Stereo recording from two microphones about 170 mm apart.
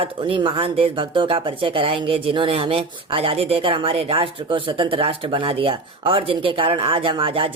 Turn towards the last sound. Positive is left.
turn(degrees=-30)  # may be behind; listen again after turning